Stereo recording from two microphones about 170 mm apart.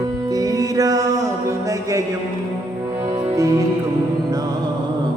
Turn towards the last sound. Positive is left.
turn(degrees=-20)  # may be behind; listen again after turning